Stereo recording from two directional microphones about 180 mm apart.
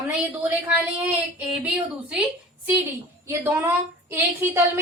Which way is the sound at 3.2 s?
10° right (ahead or behind).